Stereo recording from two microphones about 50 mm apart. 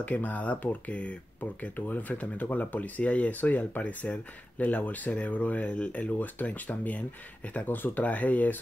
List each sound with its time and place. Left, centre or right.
0.0 s speech: left